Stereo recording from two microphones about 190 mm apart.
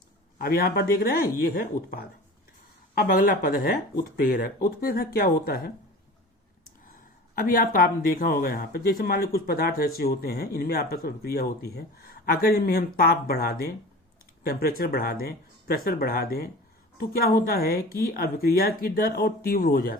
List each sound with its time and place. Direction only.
0.3 s speech: 55° left (ahead or behind)
7.3 s speech: 50° left (ahead or behind)